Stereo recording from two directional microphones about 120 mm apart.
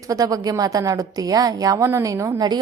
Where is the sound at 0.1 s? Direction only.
30° right (ahead or behind).